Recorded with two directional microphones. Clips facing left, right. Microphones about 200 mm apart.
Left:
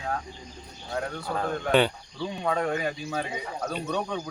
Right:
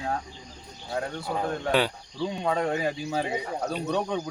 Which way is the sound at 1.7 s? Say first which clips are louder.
Left 3 dB; 5° right (ahead or behind).